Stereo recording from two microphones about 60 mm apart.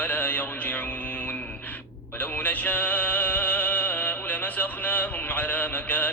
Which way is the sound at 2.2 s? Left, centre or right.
Left.